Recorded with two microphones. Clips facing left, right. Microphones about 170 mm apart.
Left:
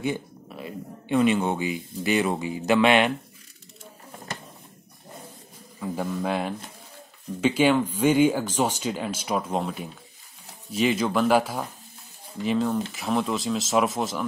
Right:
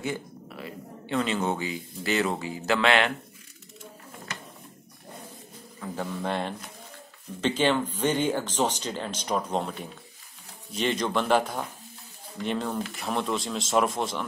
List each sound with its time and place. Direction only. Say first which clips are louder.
0.0 s speech: left 4 dB; 20° left (ahead or behind)
6.1 s speech: left 1 dB; 5° left (ahead or behind)